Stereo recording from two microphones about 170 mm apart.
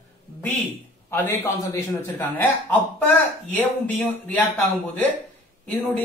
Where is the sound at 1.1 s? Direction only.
15° left (ahead or behind).